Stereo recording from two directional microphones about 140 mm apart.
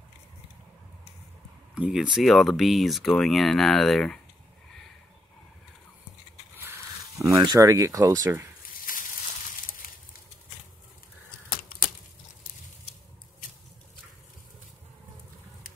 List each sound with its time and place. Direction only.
1.8 s speech: 5° right (ahead or behind)
7.2 s speech: 25° right (ahead or behind)
8.9 s a sound: 85° left